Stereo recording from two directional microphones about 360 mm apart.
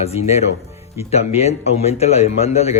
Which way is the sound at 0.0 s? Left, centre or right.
Centre.